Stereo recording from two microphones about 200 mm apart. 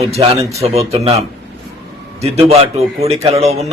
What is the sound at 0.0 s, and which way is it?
A man's voice, 30° right (ahead or behind).